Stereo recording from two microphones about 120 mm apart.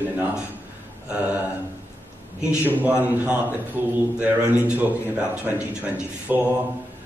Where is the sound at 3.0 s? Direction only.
15° right (ahead or behind).